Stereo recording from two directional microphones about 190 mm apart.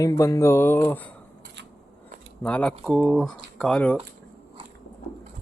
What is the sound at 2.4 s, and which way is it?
Speech, 5° left (ahead or behind).